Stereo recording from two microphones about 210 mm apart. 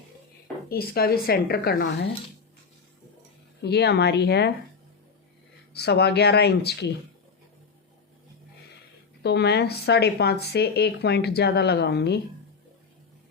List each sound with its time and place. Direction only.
0.7 s speech: 45° left (ahead or behind)
3.6 s speech: 50° left (ahead or behind)
5.7 s speech: 50° left (ahead or behind)
9.2 s speech: 50° left (ahead or behind)